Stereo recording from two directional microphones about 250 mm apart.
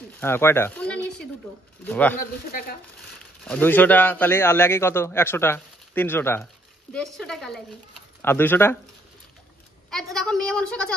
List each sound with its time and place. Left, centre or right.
0.2 s a sound: centre
1.9 s a man's voice: centre
2.1 s speech: left
3.4 s a man's voice: centre
9.8 s a woman's voice: centre